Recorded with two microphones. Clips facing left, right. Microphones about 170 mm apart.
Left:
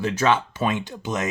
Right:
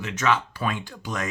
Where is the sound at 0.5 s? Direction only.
20° left (ahead or behind).